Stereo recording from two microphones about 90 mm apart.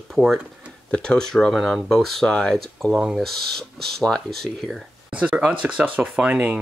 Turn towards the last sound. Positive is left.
turn(degrees=-15)  # may be behind; listen again after turning